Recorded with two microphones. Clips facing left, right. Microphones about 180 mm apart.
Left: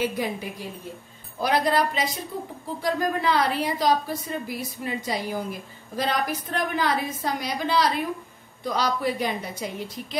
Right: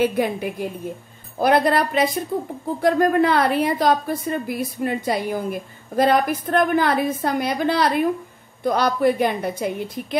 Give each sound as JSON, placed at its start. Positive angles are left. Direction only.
{"t": 0.0, "sound": "a woman's voice", "side_deg": -60}